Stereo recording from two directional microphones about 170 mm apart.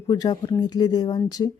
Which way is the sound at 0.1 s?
25° left (ahead or behind).